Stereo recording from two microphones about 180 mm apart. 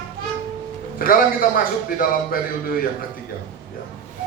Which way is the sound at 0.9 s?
50° left (ahead or behind).